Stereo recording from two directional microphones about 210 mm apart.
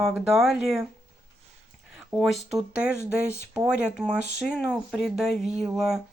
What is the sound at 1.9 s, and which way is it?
Speech, centre (ahead or behind).